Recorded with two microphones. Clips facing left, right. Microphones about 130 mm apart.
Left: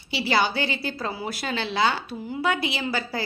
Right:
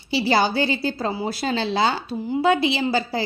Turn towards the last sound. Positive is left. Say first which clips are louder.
# right 6 dB
turn(degrees=-30)  # may be behind; listen again after turning